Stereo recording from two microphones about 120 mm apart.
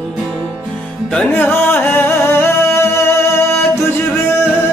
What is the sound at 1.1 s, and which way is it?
Music, 15° left (ahead or behind).